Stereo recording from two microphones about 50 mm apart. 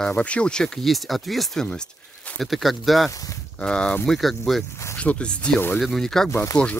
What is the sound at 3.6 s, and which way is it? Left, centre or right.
Speech, centre.